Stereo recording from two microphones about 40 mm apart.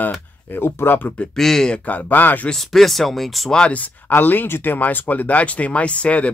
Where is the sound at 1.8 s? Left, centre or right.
Left.